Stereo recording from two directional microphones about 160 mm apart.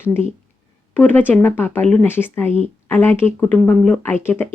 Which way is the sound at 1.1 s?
10° left (ahead or behind).